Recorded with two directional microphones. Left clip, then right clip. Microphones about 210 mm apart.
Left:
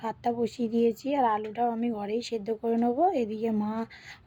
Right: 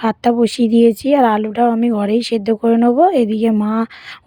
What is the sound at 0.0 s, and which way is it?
Speech, 50° right (ahead or behind).